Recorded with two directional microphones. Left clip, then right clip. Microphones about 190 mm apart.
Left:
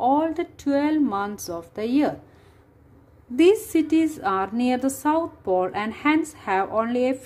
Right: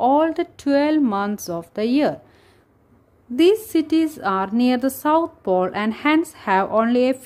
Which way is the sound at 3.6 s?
20° right (ahead or behind).